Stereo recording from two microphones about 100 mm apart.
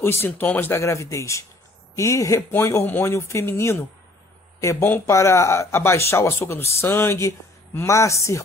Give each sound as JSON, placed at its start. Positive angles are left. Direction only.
{"t": 0.0, "sound": "speech", "side_deg": 25}